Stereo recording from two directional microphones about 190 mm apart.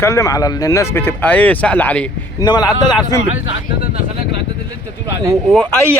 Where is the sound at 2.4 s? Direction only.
20° left (ahead or behind).